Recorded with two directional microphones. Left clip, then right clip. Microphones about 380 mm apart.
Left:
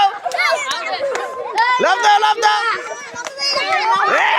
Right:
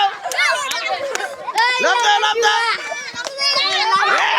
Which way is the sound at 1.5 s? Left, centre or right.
Centre.